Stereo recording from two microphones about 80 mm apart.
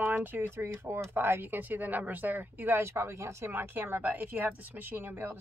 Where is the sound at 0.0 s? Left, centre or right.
Right.